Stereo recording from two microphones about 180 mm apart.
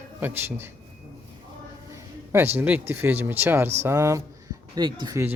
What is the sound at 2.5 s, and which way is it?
A man's voice, 10° right (ahead or behind).